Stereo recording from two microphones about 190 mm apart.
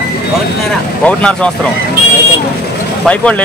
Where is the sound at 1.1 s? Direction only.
5° left (ahead or behind).